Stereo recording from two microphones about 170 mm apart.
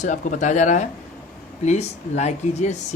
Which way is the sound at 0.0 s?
45° left (ahead or behind).